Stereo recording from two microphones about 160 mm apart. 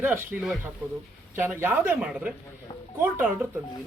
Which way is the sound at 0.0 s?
10° right (ahead or behind).